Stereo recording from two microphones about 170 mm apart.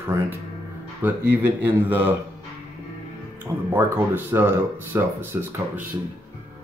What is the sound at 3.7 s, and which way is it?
Speech, 15° right (ahead or behind).